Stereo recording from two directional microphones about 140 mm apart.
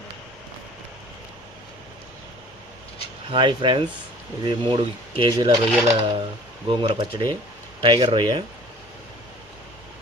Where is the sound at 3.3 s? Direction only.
35° right (ahead or behind).